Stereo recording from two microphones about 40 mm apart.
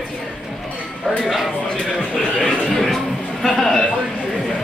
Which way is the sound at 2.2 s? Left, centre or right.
Centre.